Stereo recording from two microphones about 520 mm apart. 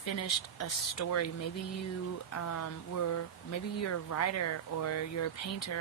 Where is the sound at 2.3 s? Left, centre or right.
Left.